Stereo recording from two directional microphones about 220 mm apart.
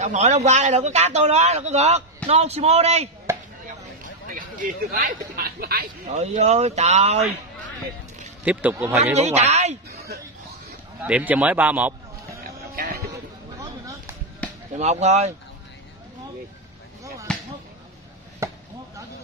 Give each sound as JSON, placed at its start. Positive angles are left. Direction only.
{"t": 0.0, "sound": "a man's voice", "side_deg": -30}
{"t": 3.3, "sound": "chopping", "side_deg": -10}
{"t": 4.0, "sound": "a sound", "side_deg": -35}
{"t": 6.0, "sound": "a man's voice", "side_deg": -30}
{"t": 8.5, "sound": "a man's voice", "side_deg": -10}
{"t": 9.0, "sound": "a man's voice", "side_deg": -30}
{"t": 9.8, "sound": "speech", "side_deg": -45}
{"t": 11.1, "sound": "a man's voice", "side_deg": -5}
{"t": 12.4, "sound": "a sound", "side_deg": -45}
{"t": 13.1, "sound": "a sound", "side_deg": -15}
{"t": 14.4, "sound": "chop", "side_deg": 5}
{"t": 14.8, "sound": "a man's voice", "side_deg": -30}
{"t": 17.3, "sound": "basketball bounce", "side_deg": 5}
{"t": 18.4, "sound": "chop", "side_deg": -15}